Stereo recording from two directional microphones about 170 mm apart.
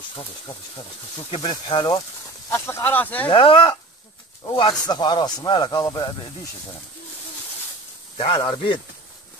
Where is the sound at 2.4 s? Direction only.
15° left (ahead or behind).